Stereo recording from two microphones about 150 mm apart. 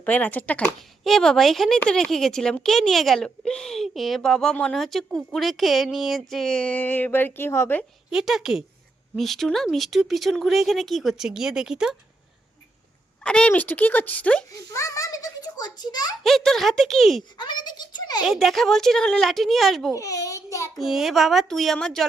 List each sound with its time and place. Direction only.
0.0 s speech: 10° left (ahead or behind)
8.1 s speech: 5° right (ahead or behind)
13.2 s speech: 5° left (ahead or behind)
14.5 s a child's voice: 20° left (ahead or behind)
16.2 s speech: 5° left (ahead or behind)
17.3 s a child's voice: 30° left (ahead or behind)
18.3 s speech: centre (ahead or behind)
20.0 s a child's voice: 20° left (ahead or behind)
20.7 s speech: centre (ahead or behind)